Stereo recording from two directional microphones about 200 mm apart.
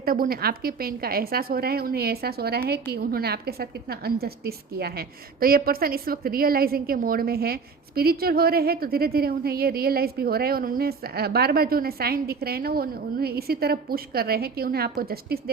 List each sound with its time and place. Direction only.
0.0 s a woman's voice: 45° right (ahead or behind)